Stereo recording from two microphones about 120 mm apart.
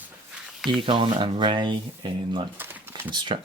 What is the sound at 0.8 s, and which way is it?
Speech, 45° right (ahead or behind).